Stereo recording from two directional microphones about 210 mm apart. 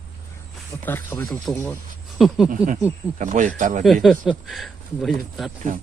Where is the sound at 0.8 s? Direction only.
10° left (ahead or behind).